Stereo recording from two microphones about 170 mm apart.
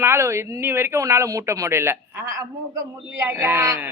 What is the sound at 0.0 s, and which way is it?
Speech, 15° right (ahead or behind).